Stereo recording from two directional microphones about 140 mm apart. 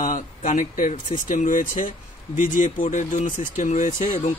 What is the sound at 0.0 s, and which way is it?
Speech, 65° left (ahead or behind).